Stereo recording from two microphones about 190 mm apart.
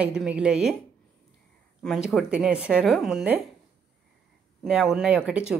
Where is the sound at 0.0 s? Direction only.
5° right (ahead or behind).